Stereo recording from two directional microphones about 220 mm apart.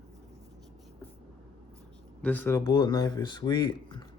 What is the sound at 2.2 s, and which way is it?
Speech, 10° left (ahead or behind).